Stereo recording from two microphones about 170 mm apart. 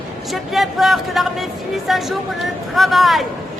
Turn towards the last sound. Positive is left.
turn(degrees=0)  # may be behind; listen again after turning